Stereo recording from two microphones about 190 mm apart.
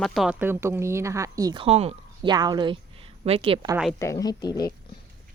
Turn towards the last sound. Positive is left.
turn(degrees=20)  # may be behind; listen again after turning